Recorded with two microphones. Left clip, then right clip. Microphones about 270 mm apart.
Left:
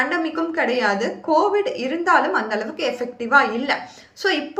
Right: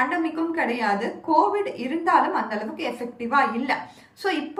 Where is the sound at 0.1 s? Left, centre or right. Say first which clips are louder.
Left 3 dB; centre.